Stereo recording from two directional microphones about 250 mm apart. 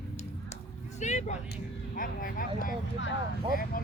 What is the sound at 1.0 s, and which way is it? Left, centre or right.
Vehicle, left.